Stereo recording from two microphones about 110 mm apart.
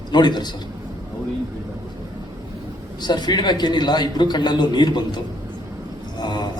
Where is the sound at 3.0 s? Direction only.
40° left (ahead or behind).